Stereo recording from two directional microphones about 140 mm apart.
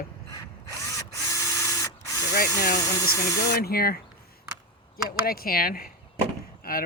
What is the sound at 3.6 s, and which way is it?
Speech, 90° left.